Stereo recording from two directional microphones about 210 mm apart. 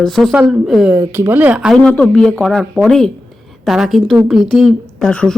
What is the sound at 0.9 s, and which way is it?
A woman's voice, 15° right (ahead or behind).